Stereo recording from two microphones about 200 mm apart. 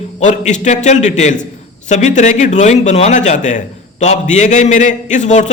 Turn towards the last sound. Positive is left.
turn(degrees=35)  # may be behind; listen again after turning